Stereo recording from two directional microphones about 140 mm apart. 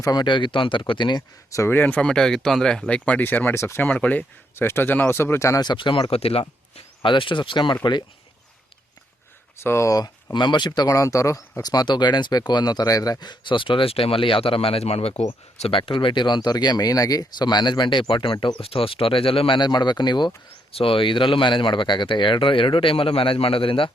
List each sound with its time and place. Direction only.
0.0 s speech: 30° left (ahead or behind)
1.5 s speech: 20° left (ahead or behind)
9.6 s speech: 20° left (ahead or behind); by 23.9 s 40° left (ahead or behind)